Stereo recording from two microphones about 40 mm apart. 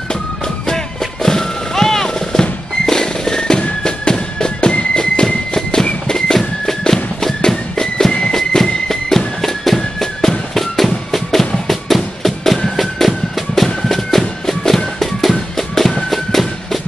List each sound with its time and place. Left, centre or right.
1.2 s music: centre
6.0 s a sound: centre
6.9 s walk: centre
8.3 s music: centre